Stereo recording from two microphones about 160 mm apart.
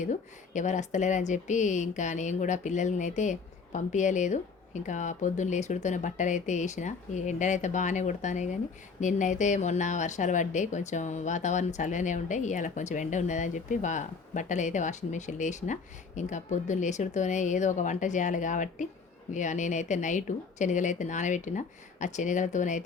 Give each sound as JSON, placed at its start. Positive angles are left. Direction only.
{"t": 0.0, "sound": "a woman's voice", "side_deg": 50}